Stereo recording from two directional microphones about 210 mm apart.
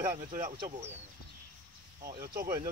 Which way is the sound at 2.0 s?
20° right (ahead or behind).